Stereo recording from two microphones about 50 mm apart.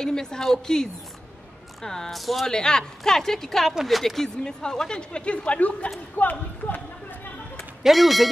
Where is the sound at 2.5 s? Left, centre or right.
Centre; by 6.8 s left.